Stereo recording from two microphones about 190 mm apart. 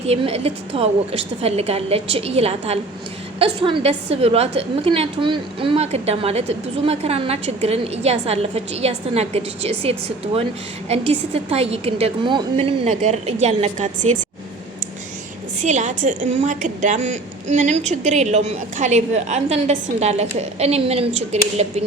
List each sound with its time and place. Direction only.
0.0 s a woman's voice: 35° right (ahead or behind)
15.6 s a woman's voice: 40° right (ahead or behind)